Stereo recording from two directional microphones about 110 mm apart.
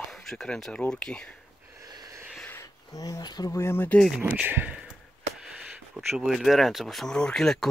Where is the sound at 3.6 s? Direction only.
20° left (ahead or behind).